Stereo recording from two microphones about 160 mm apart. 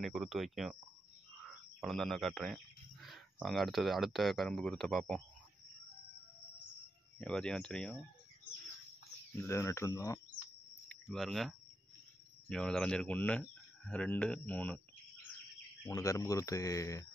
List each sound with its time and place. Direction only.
0.0 s speech: centre (ahead or behind)
1.8 s speech: centre (ahead or behind)
7.2 s speech: 5° left (ahead or behind)
9.4 s speech: 15° left (ahead or behind)
10.9 s speech: 5° left (ahead or behind)
15.8 s speech: 20° left (ahead or behind)